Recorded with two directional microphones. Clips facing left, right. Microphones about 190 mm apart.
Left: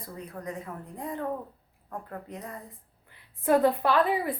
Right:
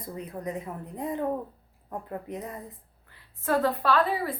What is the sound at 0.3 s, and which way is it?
A woman's voice, 20° right (ahead or behind).